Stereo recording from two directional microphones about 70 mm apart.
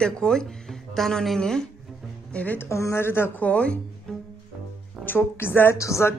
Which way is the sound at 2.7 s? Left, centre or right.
Left.